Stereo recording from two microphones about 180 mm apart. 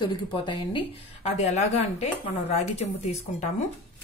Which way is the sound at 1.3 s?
40° left (ahead or behind).